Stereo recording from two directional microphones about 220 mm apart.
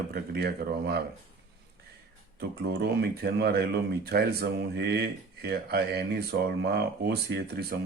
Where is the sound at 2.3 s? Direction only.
45° right (ahead or behind).